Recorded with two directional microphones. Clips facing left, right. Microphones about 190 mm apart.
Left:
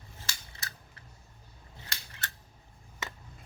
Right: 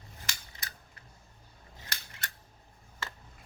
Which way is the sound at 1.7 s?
15° right (ahead or behind).